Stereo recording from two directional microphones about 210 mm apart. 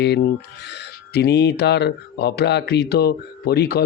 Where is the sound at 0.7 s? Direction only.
50° left (ahead or behind).